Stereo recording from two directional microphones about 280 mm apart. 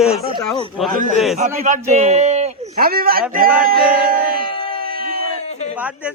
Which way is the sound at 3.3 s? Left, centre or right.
Right.